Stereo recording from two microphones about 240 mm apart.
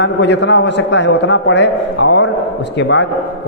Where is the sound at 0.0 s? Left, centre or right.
Left.